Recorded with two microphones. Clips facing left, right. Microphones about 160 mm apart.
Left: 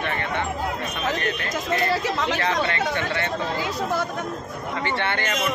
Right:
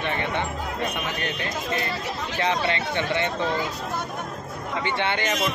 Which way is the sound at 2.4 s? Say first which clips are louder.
Left 1 dB; 20° right (ahead or behind).